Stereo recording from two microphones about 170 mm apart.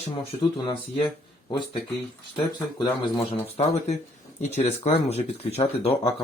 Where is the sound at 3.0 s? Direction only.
25° left (ahead or behind).